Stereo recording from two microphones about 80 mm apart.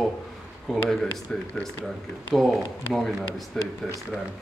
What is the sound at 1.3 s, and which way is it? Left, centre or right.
Speech, centre.